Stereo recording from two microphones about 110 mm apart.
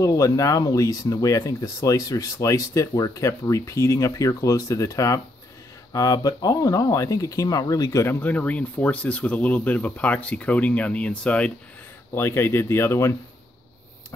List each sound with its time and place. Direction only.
0.0 s speech: 30° left (ahead or behind)
8.1 s speech: 15° left (ahead or behind)
12.1 s speech: 20° left (ahead or behind)